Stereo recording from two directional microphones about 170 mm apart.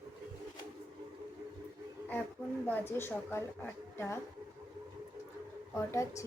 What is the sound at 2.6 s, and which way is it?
A woman's voice, 10° left (ahead or behind).